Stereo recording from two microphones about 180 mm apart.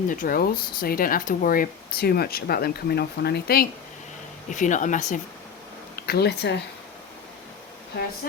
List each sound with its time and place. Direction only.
0.1 s speech: 50° left (ahead or behind)
4.4 s speech: 45° left (ahead or behind)
6.0 s speech: 60° left (ahead or behind)